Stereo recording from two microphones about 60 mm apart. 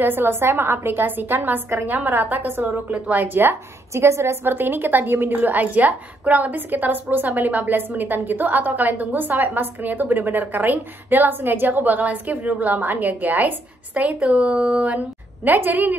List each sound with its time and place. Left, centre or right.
0.0 s a woman's voice: right
3.9 s a woman's voice: right